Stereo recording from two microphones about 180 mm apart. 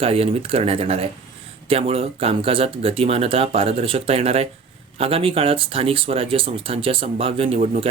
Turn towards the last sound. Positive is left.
turn(degrees=-35)  # may be behind; listen again after turning